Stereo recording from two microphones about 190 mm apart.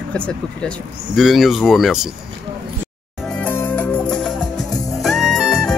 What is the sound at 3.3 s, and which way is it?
Music, 10° left (ahead or behind).